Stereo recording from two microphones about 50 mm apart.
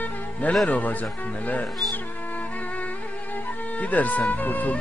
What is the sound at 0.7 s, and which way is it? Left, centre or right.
Speech, left.